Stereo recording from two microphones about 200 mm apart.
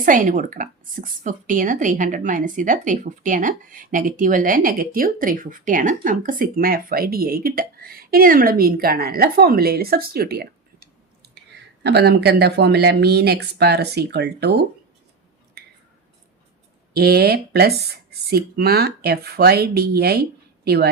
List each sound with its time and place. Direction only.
0.0 s speech: 40° right (ahead or behind)
11.4 s a sound: 55° right (ahead or behind)
11.8 s speech: 55° right (ahead or behind)
15.6 s finger snapping: 50° right (ahead or behind)
16.9 s speech: 50° right (ahead or behind)